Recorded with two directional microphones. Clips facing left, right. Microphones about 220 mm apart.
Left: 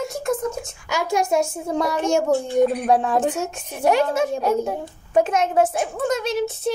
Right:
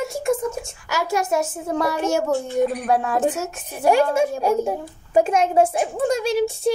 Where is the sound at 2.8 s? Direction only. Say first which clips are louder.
Left 2 dB; 15° left (ahead or behind).